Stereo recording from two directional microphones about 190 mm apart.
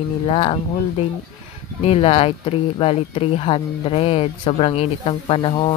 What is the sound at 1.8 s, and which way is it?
A woman's voice, 30° left (ahead or behind).